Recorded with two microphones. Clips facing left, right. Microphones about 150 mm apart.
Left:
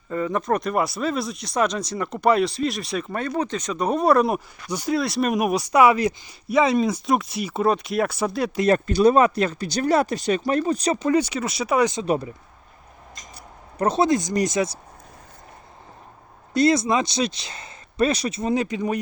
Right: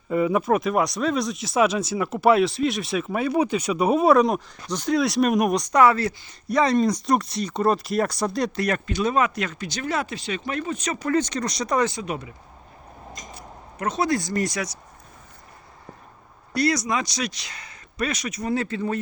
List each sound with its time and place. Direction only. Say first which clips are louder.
0.1 s speech: right 3 dB; 10° right (ahead or behind); by 6.1 s 15° left (ahead or behind)
6.5 s speech: left 1 dB; 5° left (ahead or behind)
8.5 s speech: left 6 dB; 30° left (ahead or behind)
11.0 s speech: right 2 dB; 10° left (ahead or behind)
12.0 s speech: left 8 dB; 35° left (ahead or behind)
13.7 s speech: left 5 dB; 30° left (ahead or behind)
14.1 s speech: left 3 dB; 20° left (ahead or behind)
16.6 s speech: left 4 dB; 25° left (ahead or behind)